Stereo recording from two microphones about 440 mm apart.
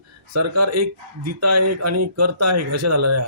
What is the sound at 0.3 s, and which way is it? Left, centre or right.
Speech, right.